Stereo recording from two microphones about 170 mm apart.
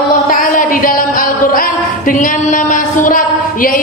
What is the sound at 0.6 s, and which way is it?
Music, 55° left (ahead or behind).